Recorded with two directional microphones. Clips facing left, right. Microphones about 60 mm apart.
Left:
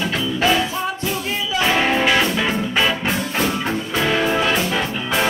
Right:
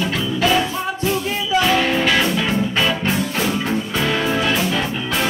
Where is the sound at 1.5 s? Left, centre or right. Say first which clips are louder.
Right 1 dB; centre.